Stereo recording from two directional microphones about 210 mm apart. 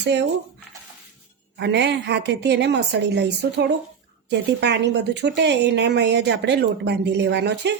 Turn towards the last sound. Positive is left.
turn(degrees=-55)  # may be behind; listen again after turning